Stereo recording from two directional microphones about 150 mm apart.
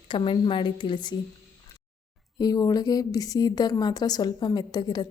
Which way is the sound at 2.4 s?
25° left (ahead or behind).